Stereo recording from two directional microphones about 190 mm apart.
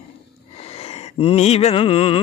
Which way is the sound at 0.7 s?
35° left (ahead or behind).